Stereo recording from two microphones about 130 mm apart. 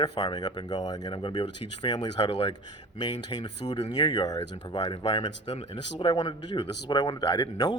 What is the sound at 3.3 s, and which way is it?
Speech, 30° left (ahead or behind).